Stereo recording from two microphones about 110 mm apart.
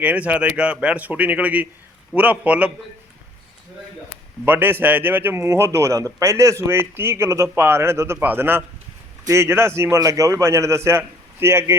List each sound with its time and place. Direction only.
0.0 s speech: 15° right (ahead or behind)
4.4 s a man's voice: 20° right (ahead or behind)